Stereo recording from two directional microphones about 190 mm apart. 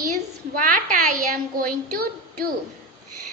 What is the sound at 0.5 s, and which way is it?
A woman's voice, 45° right (ahead or behind).